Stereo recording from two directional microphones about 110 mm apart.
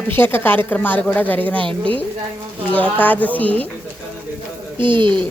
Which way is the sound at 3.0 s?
15° left (ahead or behind).